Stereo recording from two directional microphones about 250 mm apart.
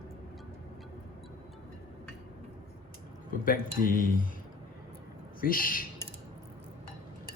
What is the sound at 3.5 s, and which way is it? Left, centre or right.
Speech, left.